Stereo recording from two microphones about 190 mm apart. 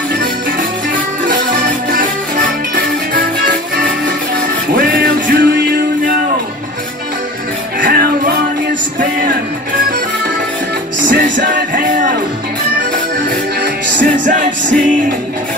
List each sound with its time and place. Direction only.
4.7 s music: 50° right (ahead or behind)
7.8 s music: 55° right (ahead or behind)
11.7 s music: 45° right (ahead or behind)
14.1 s music: 45° right (ahead or behind)